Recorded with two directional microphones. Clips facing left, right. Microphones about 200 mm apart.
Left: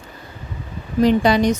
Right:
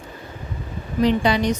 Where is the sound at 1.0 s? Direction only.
45° left (ahead or behind).